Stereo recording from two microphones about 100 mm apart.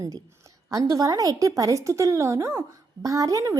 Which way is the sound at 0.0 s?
35° right (ahead or behind).